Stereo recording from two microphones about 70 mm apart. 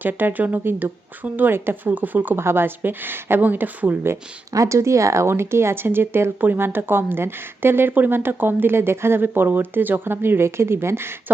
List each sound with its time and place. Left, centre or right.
0.0 s speech: right
4.5 s speech: right